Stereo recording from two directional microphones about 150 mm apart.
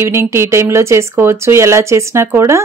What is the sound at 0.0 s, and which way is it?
A woman's voice, 15° right (ahead or behind).